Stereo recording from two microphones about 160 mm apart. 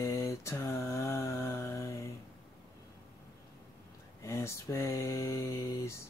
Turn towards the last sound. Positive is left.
turn(degrees=20)  # may be behind; listen again after turning